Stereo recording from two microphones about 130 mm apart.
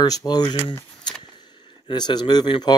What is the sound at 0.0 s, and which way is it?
Speech, 30° left (ahead or behind).